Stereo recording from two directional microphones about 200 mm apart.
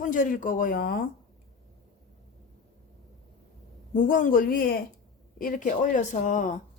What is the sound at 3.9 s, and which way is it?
A woman's voice, 40° left (ahead or behind).